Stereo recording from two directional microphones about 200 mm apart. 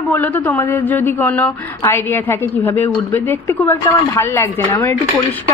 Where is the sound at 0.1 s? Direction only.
10° left (ahead or behind).